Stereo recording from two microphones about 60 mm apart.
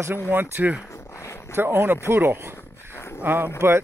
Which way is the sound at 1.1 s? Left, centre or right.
Left.